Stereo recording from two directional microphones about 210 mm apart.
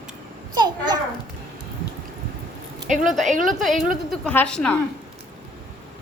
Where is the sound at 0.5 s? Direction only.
20° right (ahead or behind).